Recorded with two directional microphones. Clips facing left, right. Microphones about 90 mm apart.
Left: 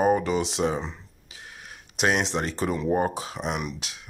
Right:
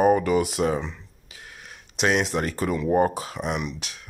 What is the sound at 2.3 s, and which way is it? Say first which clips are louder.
Speech: right 2 dB; 25° left (ahead or behind).